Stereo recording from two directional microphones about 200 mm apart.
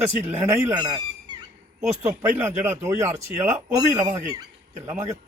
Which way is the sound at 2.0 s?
15° right (ahead or behind).